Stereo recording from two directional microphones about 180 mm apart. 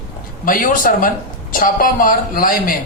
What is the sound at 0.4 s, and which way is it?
A man's voice, 50° left (ahead or behind).